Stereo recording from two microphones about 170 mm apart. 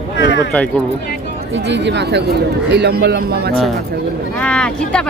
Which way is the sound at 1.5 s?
90° right.